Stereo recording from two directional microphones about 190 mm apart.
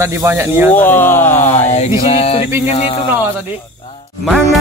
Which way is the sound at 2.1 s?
30° left (ahead or behind).